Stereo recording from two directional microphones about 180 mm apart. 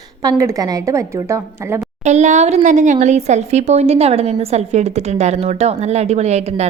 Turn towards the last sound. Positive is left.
turn(degrees=-40)  # may be behind; listen again after turning